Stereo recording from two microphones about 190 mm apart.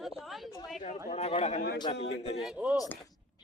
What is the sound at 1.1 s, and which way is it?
Speech, 35° left (ahead or behind).